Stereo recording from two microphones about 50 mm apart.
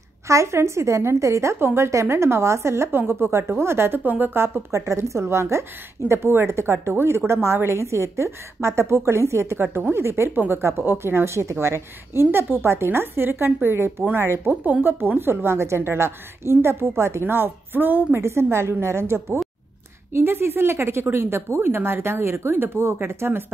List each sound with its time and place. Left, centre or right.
0.3 s a woman's voice: right
4.6 s a woman's voice: right
9.6 s a woman's voice: right
10.3 s a woman's voice: right
11.0 s a woman's voice: right
14.4 s a woman's voice: right
14.9 s speech: right
17.2 s a woman's voice: right
18.2 s speech: right